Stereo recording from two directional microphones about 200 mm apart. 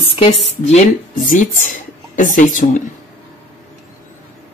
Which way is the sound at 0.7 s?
40° left (ahead or behind).